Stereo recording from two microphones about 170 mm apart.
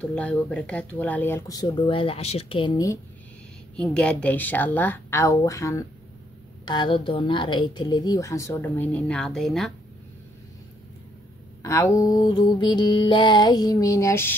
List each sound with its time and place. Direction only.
0.0 s speech: 5° left (ahead or behind); by 2.7 s 35° left (ahead or behind)
3.7 s a woman's voice: 5° left (ahead or behind)
11.6 s a woman's voice: 20° left (ahead or behind)